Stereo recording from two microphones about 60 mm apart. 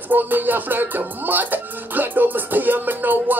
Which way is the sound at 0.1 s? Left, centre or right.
Right.